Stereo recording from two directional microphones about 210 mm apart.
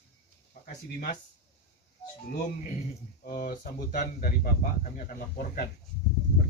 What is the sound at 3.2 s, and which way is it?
Speech, 40° left (ahead or behind).